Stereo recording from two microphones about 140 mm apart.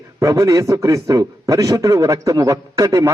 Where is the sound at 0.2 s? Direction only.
25° right (ahead or behind).